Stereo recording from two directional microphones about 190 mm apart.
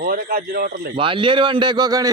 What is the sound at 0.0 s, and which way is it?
Speech, 50° right (ahead or behind).